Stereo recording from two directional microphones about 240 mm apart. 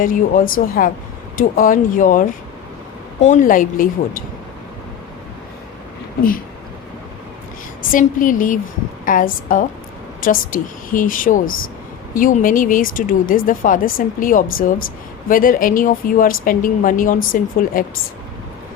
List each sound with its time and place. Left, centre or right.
0.0 s speech: left
7.9 s speech: left